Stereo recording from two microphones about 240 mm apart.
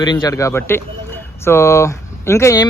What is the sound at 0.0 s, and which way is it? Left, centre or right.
Speech, centre.